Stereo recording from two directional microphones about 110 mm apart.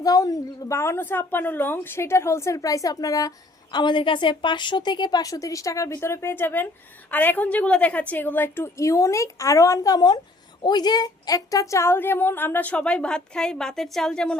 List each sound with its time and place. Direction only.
0.0 s a woman's voice: 35° left (ahead or behind); by 14.3 s 5° left (ahead or behind)